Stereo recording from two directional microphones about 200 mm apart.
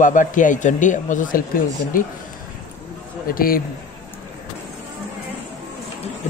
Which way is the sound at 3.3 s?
45° left (ahead or behind).